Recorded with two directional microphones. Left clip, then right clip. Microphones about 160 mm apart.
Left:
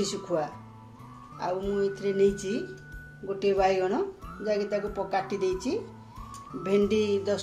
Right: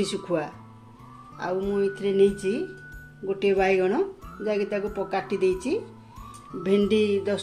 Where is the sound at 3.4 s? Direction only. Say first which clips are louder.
Right 2 dB; 55° right (ahead or behind).